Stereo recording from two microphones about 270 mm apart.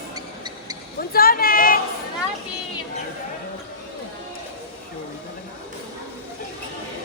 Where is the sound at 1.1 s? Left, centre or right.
Left.